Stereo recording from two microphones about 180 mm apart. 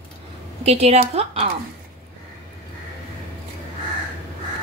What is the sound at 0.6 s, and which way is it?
Speech, 35° right (ahead or behind).